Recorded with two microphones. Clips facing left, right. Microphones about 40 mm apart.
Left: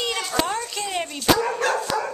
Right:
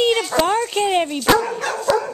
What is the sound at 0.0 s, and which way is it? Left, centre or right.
Speech, right.